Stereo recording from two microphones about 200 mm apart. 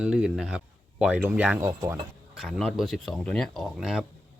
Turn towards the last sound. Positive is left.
turn(degrees=0)  # may be behind; listen again after turning